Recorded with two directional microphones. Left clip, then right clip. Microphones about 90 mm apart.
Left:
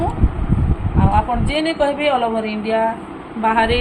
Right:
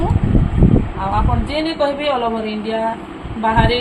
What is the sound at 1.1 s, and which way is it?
A woman's voice, 25° left (ahead or behind).